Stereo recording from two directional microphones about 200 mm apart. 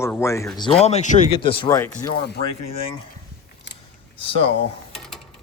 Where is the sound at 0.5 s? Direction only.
25° left (ahead or behind).